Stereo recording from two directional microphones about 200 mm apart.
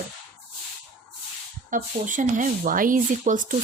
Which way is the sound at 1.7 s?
40° right (ahead or behind).